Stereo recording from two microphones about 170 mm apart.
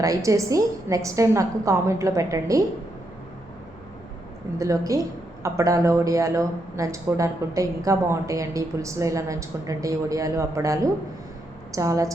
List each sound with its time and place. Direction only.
0.0 s a woman's voice: 20° right (ahead or behind)
4.5 s a woman's voice: 20° right (ahead or behind)